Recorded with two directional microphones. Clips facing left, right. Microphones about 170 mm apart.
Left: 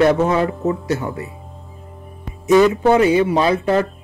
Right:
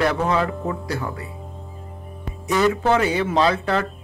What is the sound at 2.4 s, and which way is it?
Speech, 20° left (ahead or behind).